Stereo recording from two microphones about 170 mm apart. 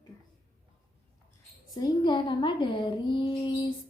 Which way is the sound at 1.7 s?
25° left (ahead or behind).